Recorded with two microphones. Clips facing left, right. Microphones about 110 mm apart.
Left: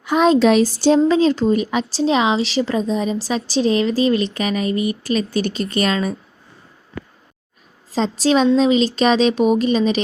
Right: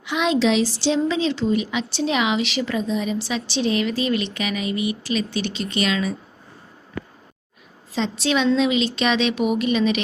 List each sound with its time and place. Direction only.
0.0 s speech: 40° left (ahead or behind)
7.9 s speech: 35° left (ahead or behind)